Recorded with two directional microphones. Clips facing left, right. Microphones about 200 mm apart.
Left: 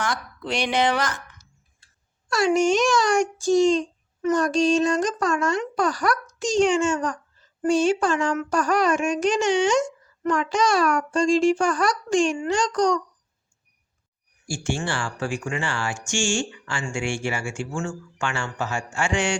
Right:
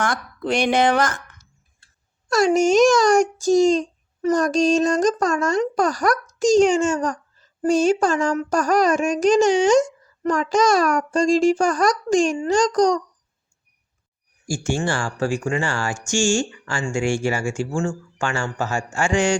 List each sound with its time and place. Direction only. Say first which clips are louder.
0.0 s a woman's voice: right 4 dB; 50° right (ahead or behind)
2.3 s a child's voice: right 4 dB; 40° right (ahead or behind)
14.4 s a child's voice: right 4 dB; 40° right (ahead or behind)